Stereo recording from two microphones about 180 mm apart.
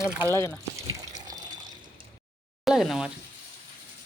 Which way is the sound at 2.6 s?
Centre (ahead or behind).